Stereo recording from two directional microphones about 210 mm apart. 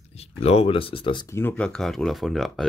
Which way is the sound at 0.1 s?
30° left (ahead or behind).